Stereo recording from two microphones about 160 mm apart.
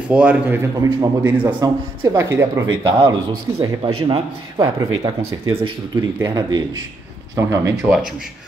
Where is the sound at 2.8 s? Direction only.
30° right (ahead or behind).